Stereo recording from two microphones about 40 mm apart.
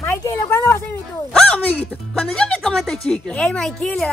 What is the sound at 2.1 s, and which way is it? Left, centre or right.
Speech, centre.